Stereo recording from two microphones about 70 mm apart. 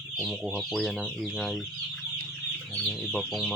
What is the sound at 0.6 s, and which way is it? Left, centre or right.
Chicken, centre.